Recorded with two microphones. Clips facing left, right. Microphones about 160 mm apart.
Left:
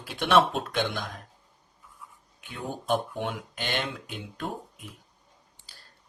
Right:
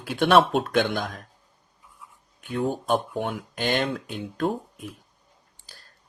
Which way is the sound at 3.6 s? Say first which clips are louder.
Right 9 dB; 40° right (ahead or behind).